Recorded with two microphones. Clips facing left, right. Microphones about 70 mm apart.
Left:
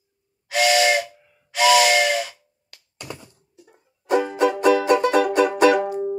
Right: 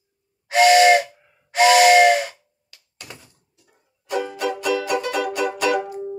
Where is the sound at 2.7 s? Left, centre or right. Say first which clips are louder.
Left 2 dB; left.